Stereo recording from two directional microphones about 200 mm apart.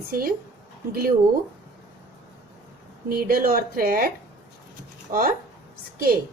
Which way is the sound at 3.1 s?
45° right (ahead or behind).